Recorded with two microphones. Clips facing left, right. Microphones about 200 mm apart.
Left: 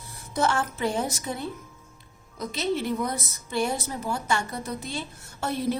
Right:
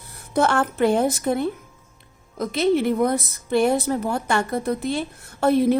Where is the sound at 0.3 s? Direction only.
60° right (ahead or behind).